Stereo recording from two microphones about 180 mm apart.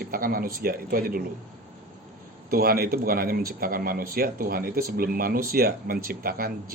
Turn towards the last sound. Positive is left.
turn(degrees=-55)  # may be behind; listen again after turning